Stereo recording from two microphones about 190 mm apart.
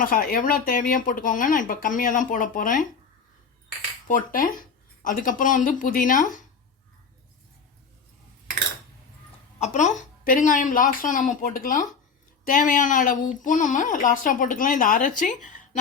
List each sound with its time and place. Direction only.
0.0 s speech: 50° left (ahead or behind)
4.1 s speech: 45° left (ahead or behind)
9.6 s speech: 40° left (ahead or behind)